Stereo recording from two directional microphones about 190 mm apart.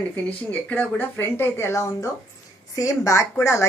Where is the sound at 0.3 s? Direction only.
10° left (ahead or behind).